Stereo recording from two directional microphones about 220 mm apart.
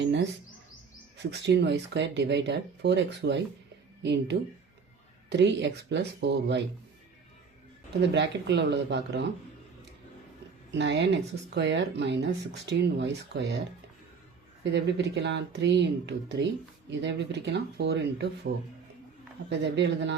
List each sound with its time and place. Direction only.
0.0 s bird: 55° right (ahead or behind)
1.2 s speech: 50° right (ahead or behind)
8.1 s speech: 50° right (ahead or behind)
10.8 s speech: 55° right (ahead or behind)
14.6 s speech: 50° right (ahead or behind)